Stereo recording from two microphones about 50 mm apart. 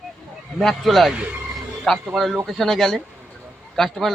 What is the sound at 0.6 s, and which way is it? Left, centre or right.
Speech, centre.